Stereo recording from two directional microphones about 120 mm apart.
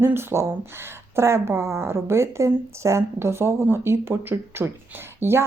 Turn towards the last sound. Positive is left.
turn(degrees=-20)  # may be behind; listen again after turning